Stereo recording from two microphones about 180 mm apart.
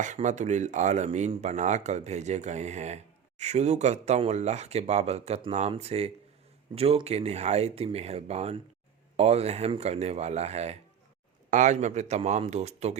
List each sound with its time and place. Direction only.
0.0 s speech: 40° right (ahead or behind)